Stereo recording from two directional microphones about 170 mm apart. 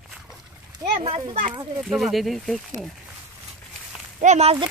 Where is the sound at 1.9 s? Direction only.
Centre (ahead or behind).